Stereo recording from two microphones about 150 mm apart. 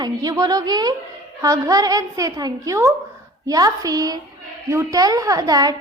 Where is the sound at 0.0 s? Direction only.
25° right (ahead or behind).